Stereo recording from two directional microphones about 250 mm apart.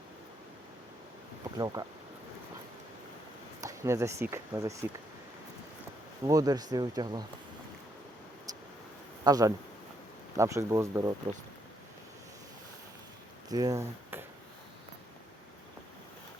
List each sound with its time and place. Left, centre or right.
1.5 s speech: centre
3.6 s speech: centre
6.2 s speech: centre
9.2 s speech: centre
13.5 s speech: centre